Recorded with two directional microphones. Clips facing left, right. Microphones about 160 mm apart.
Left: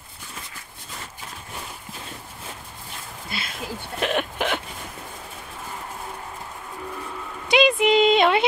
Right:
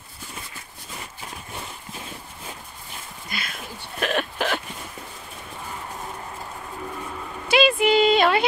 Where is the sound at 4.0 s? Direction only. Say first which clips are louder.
Even; 20° left (ahead or behind).